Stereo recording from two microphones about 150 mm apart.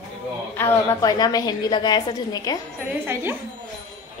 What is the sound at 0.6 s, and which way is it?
A woman's voice, 20° left (ahead or behind).